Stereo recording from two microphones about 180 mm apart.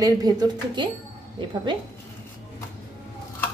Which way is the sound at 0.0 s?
20° right (ahead or behind).